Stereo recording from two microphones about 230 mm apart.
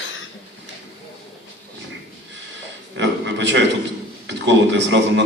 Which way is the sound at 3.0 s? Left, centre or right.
Right.